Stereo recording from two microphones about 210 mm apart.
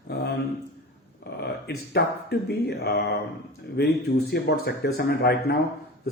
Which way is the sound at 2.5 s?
50° left (ahead or behind).